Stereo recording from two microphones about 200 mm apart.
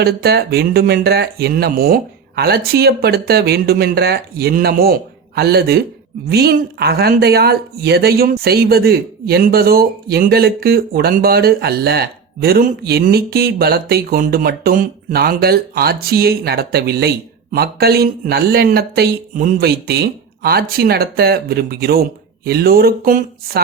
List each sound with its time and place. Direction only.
0.0 s speech: 50° right (ahead or behind)